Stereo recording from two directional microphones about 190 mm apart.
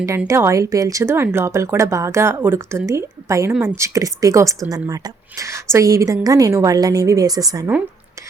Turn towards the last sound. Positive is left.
turn(degrees=-20)  # may be behind; listen again after turning